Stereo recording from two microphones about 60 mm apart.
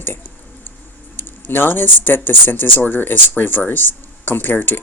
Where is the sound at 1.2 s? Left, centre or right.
Left.